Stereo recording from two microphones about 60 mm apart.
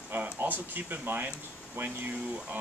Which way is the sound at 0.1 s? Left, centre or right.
Right.